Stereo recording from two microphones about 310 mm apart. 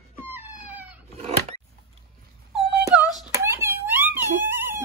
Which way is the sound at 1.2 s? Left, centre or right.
Centre.